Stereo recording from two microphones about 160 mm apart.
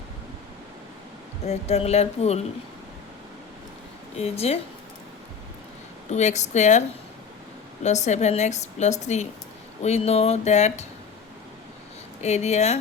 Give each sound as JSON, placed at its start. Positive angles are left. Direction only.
{"t": 1.5, "sound": "speech", "side_deg": 40}
{"t": 4.2, "sound": "speech", "side_deg": 40}
{"t": 6.1, "sound": "a woman's voice", "side_deg": 45}
{"t": 7.9, "sound": "a woman's voice", "side_deg": 45}
{"t": 12.2, "sound": "a woman's voice", "side_deg": 45}